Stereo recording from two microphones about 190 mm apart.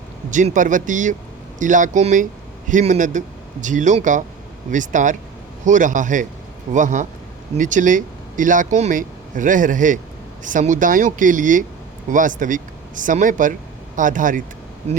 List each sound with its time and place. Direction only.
0.3 s speech: 40° right (ahead or behind)